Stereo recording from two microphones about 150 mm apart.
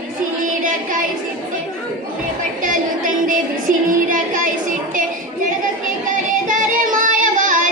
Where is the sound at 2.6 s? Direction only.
60° right (ahead or behind).